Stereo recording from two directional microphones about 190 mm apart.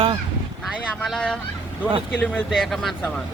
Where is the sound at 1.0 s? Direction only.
Centre (ahead or behind).